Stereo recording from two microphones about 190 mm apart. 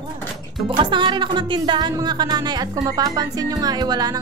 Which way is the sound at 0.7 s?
25° right (ahead or behind).